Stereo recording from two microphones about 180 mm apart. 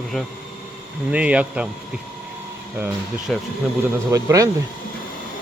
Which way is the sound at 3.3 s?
Centre (ahead or behind).